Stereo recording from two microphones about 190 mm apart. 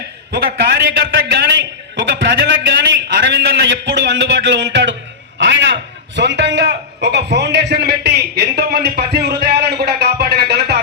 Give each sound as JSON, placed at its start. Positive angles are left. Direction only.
{"t": 0.3, "sound": "a man's voice", "side_deg": -55}